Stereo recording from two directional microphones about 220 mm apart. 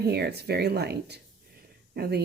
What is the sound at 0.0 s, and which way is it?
Speech, 45° right (ahead or behind).